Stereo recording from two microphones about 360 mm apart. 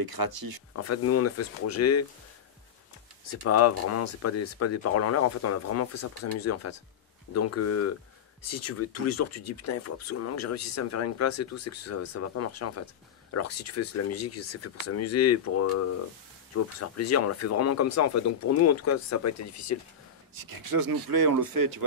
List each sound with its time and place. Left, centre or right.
0.0 s speech: right
0.7 s speech: left
3.3 s speech: left
20.4 s speech: right